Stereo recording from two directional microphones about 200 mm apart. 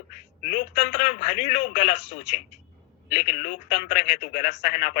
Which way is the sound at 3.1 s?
40° left (ahead or behind).